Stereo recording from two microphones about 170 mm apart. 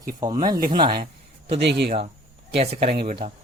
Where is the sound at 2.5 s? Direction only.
35° right (ahead or behind).